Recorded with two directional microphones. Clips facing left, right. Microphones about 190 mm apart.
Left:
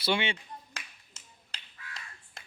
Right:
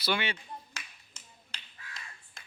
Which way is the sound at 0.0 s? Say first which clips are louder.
Left 2 dB; 25° left (ahead or behind).